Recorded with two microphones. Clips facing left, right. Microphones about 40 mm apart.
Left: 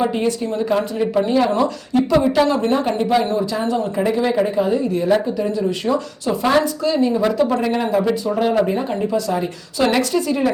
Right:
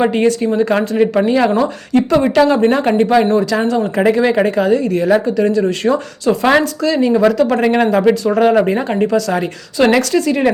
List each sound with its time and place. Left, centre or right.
0.0 s speech: right
2.8 s speech: right
3.9 s speech: right
5.4 s speech: right